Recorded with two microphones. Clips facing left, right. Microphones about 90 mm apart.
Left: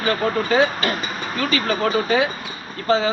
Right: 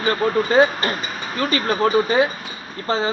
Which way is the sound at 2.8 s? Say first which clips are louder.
Left 3 dB; 40° right (ahead or behind).